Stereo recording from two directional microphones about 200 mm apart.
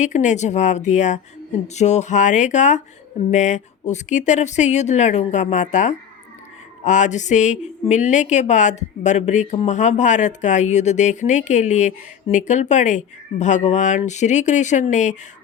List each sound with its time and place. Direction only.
0.0 s a woman's voice: 35° left (ahead or behind)